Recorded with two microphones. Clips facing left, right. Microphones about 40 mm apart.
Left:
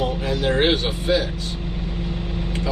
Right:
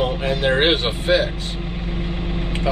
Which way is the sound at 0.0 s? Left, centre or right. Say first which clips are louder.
Right 2 dB; right.